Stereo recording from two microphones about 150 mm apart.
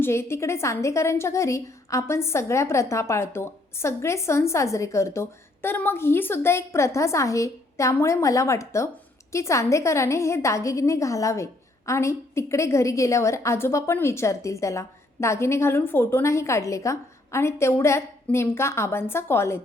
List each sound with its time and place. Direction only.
0.0 s a woman's voice: 15° left (ahead or behind)